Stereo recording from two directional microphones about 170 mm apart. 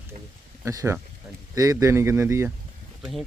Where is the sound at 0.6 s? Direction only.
20° right (ahead or behind).